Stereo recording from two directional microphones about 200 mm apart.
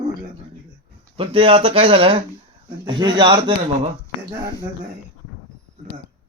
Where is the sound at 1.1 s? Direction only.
25° right (ahead or behind).